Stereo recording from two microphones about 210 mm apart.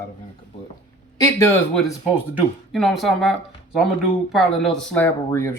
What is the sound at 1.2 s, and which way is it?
Speech, 15° left (ahead or behind).